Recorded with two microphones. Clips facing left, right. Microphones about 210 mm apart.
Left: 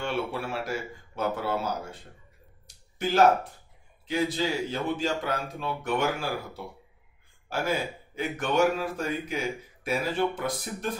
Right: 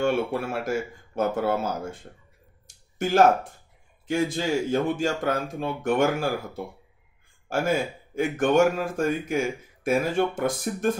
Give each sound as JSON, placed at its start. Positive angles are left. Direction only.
{"t": 0.0, "sound": "speech", "side_deg": -50}
{"t": 2.6, "sound": "a sound", "side_deg": -45}
{"t": 4.1, "sound": "speech", "side_deg": -50}
{"t": 7.4, "sound": "speech", "side_deg": -50}